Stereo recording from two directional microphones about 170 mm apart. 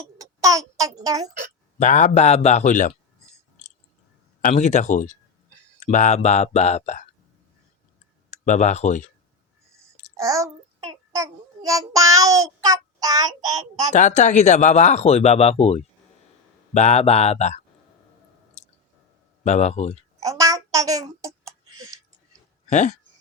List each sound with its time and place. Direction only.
0.2 s a child's voice: 20° right (ahead or behind)
1.8 s speech: 45° left (ahead or behind)
4.4 s speech: 45° left (ahead or behind)
8.3 s speech: 45° left (ahead or behind)
10.2 s a child's voice: 20° right (ahead or behind)
11.1 s child singing: 20° right (ahead or behind)
13.9 s speech: 45° left (ahead or behind)
19.5 s speech: 40° left (ahead or behind)
20.1 s a sound: 20° right (ahead or behind)
22.7 s speech: 45° left (ahead or behind)